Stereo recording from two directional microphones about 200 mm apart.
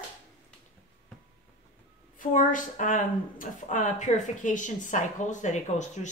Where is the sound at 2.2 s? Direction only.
40° left (ahead or behind).